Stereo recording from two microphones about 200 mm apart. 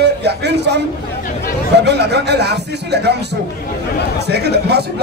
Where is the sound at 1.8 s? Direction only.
55° right (ahead or behind).